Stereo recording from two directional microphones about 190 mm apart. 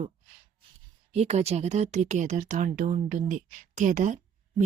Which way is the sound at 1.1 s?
35° right (ahead or behind).